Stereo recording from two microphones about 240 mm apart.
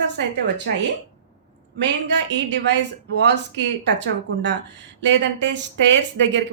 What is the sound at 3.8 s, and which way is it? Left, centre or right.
Speech, right.